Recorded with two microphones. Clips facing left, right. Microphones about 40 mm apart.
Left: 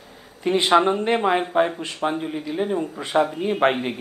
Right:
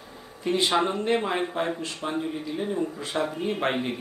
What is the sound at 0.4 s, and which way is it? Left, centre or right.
Speech, left.